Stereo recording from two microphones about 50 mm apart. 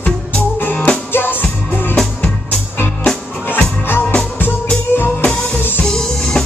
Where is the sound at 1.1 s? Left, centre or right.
Left.